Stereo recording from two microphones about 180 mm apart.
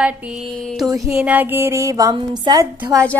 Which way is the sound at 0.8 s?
15° right (ahead or behind).